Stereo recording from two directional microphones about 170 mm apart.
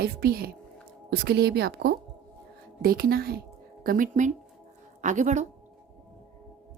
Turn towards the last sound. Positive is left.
turn(degrees=-45)  # may be behind; listen again after turning